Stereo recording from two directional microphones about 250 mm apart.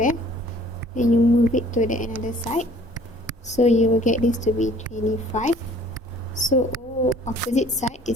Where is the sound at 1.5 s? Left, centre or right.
Left.